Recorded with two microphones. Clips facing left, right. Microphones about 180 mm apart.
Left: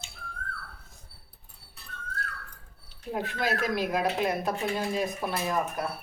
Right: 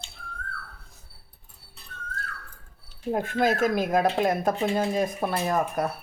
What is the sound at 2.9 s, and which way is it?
Speech, 45° right (ahead or behind).